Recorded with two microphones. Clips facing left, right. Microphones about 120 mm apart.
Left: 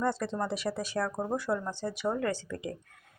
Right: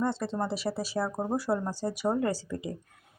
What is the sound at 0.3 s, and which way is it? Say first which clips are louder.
Speech: right 1 dB; 30° right (ahead or behind).